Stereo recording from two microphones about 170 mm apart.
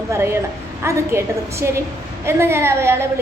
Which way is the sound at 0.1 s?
15° right (ahead or behind).